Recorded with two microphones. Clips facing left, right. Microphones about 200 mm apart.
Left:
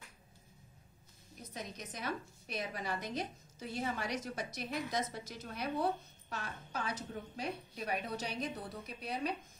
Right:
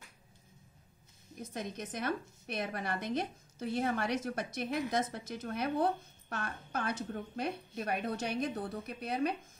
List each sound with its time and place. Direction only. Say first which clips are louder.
1.4 s a woman's voice: right 6 dB; 50° right (ahead or behind)